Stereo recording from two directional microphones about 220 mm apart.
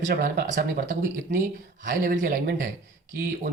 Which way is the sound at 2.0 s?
40° right (ahead or behind).